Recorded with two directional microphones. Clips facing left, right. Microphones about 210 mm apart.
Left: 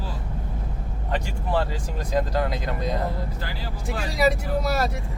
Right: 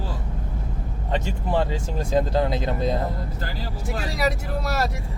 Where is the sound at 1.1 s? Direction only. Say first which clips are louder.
Right 2 dB; 20° right (ahead or behind).